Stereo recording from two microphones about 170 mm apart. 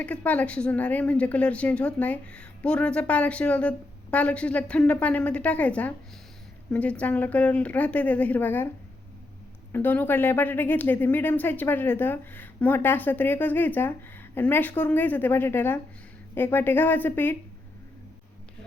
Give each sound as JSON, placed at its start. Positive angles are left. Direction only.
{"t": 0.0, "sound": "speech", "side_deg": 10}
{"t": 9.7, "sound": "speech", "side_deg": 10}